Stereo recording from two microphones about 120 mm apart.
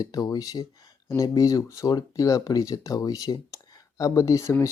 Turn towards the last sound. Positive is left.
turn(degrees=25)  # may be behind; listen again after turning